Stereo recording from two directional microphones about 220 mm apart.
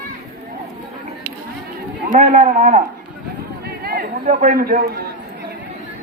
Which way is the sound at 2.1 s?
35° right (ahead or behind).